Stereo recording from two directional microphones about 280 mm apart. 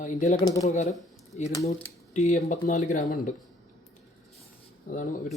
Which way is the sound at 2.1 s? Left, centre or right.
Left.